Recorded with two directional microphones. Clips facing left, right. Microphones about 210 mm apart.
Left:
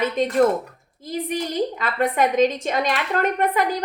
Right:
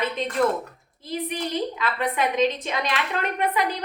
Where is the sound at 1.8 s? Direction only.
45° left (ahead or behind).